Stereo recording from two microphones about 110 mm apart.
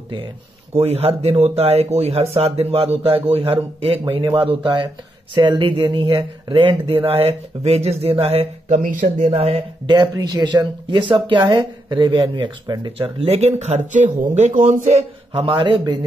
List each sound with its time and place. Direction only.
0.7 s speech: 65° right (ahead or behind)
4.4 s speech: 50° right (ahead or behind); by 8.8 s 75° right (ahead or behind)
9.0 s speech: 65° right (ahead or behind)
9.8 s speech: 40° right (ahead or behind)
12.9 s a man's voice: 55° right (ahead or behind); by 15.4 s 85° right
15.4 s speech: 50° right (ahead or behind)